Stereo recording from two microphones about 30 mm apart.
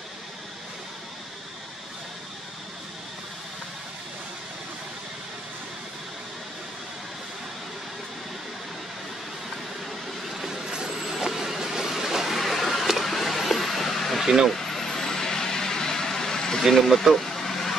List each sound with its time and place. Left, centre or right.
10.7 s vehicle: centre
12.4 s a sound: centre
14.2 s speech: centre
14.5 s vehicle: centre
16.7 s speech: centre
17.2 s vehicle: centre